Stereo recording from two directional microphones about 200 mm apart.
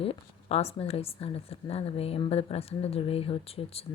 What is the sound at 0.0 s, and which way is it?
A woman's voice, 30° left (ahead or behind).